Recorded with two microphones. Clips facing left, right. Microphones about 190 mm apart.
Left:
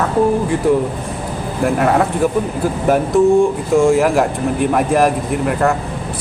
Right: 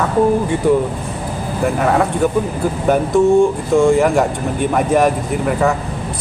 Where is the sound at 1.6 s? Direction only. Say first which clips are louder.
Left 1 dB; centre (ahead or behind).